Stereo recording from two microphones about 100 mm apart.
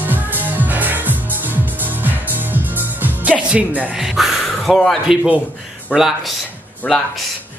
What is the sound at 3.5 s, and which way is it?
Speech, 15° right (ahead or behind).